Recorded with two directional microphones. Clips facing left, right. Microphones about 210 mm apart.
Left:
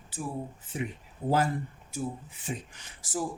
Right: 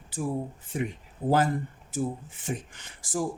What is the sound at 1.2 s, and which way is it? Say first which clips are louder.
Speech: right 3 dB; 35° right (ahead or behind).